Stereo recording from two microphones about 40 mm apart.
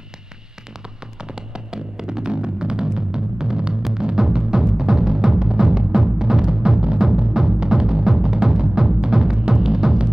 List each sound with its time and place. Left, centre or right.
1.2 s music: centre